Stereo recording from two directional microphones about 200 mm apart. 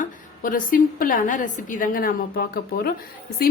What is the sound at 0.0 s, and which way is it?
A woman's voice, 40° left (ahead or behind).